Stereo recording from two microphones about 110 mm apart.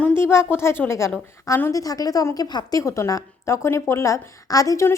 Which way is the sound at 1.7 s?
35° left (ahead or behind).